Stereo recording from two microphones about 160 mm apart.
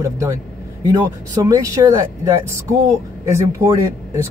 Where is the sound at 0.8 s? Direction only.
20° right (ahead or behind).